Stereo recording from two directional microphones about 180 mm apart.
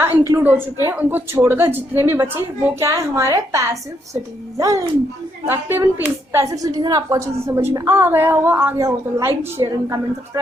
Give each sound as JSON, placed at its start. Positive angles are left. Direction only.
{"t": 0.0, "sound": "a woman's voice", "side_deg": -15}